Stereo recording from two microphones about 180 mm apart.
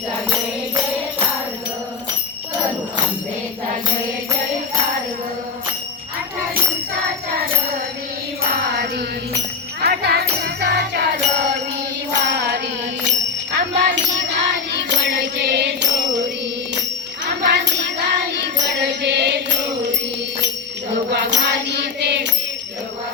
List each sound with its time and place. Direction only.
9.8 s music: 60° right (ahead or behind)
17.2 s music: 70° right (ahead or behind)
21.1 s music: 70° right (ahead or behind)